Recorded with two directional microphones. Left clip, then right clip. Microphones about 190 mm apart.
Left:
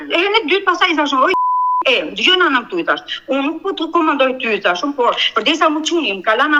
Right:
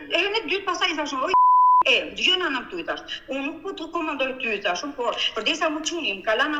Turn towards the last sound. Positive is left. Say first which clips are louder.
# left 9 dB
turn(degrees=25)  # may be behind; listen again after turning